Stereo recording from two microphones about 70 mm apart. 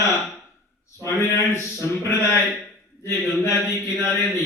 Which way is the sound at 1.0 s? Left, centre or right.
Left.